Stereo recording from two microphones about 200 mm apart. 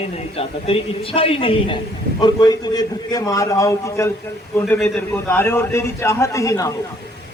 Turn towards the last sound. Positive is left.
turn(degrees=15)  # may be behind; listen again after turning